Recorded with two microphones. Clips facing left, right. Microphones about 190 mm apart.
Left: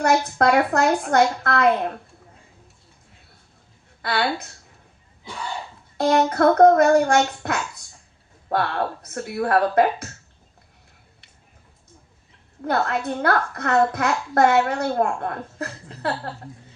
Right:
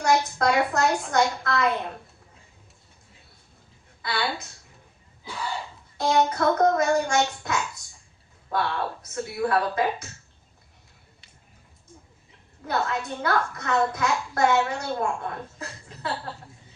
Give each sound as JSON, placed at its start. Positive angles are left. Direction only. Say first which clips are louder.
{"t": 0.0, "sound": "a woman's voice", "louder": "left 4 dB", "side_deg": 60}
{"t": 4.0, "sound": "a woman's voice", "louder": "left 5 dB", "side_deg": 60}
{"t": 6.0, "sound": "a woman's voice", "louder": "left 5 dB", "side_deg": 60}
{"t": 12.6, "sound": "a woman's voice", "louder": "left 5 dB", "side_deg": 60}